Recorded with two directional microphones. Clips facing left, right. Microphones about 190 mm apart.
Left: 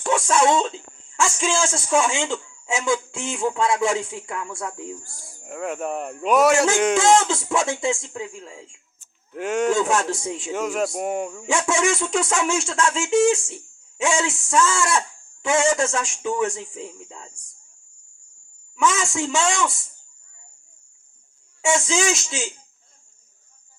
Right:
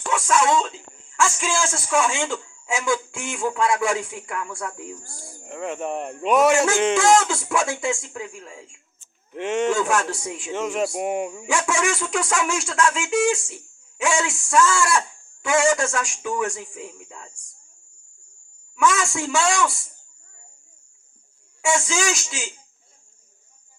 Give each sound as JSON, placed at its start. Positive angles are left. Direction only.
{"t": 0.1, "sound": "a man's voice", "side_deg": 25}
{"t": 5.5, "sound": "speech", "side_deg": 5}
{"t": 6.9, "sound": "a man's voice", "side_deg": 20}
{"t": 9.3, "sound": "speech", "side_deg": 5}
{"t": 9.9, "sound": "a man's voice", "side_deg": 25}
{"t": 10.5, "sound": "speech", "side_deg": 5}
{"t": 10.8, "sound": "speech", "side_deg": -5}
{"t": 11.4, "sound": "a man's voice", "side_deg": 25}
{"t": 18.8, "sound": "a man's voice", "side_deg": 20}
{"t": 21.6, "sound": "a man's voice", "side_deg": 20}